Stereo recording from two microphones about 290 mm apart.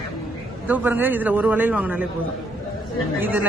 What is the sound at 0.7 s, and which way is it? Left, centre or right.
Speech, centre.